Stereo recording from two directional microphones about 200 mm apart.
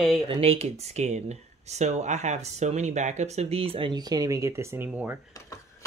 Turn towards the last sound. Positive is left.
turn(degrees=-10)  # may be behind; listen again after turning